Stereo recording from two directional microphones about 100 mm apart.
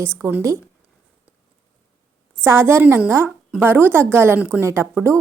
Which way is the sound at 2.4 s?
25° right (ahead or behind).